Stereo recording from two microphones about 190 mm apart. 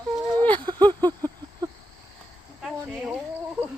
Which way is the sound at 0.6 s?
25° right (ahead or behind).